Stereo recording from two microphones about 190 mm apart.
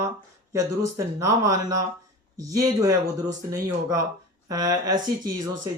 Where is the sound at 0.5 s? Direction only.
15° right (ahead or behind).